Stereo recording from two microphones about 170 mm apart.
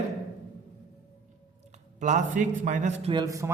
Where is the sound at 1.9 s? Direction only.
45° right (ahead or behind).